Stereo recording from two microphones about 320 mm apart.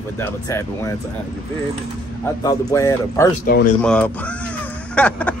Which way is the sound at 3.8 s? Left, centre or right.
Centre.